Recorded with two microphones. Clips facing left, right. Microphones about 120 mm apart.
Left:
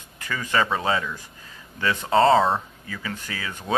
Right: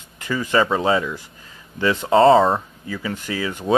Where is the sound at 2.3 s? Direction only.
5° right (ahead or behind).